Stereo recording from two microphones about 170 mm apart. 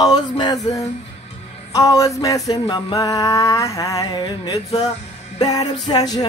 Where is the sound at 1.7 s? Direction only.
20° left (ahead or behind).